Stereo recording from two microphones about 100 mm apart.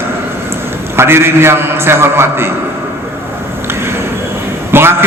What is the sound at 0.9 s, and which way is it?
A man's voice, 25° right (ahead or behind).